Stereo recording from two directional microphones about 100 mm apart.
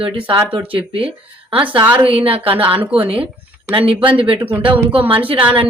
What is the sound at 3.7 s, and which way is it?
Speech, 60° right (ahead or behind).